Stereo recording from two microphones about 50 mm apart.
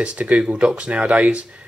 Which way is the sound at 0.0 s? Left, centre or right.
Right.